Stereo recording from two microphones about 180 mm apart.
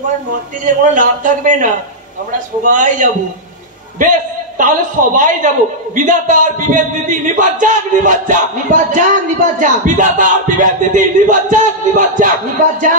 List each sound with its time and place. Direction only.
0.9 s a man's voice: 45° right (ahead or behind)